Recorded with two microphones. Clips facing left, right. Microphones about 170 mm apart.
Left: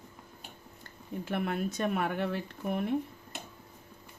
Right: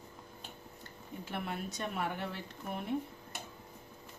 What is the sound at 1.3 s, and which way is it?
Speech, 55° left (ahead or behind).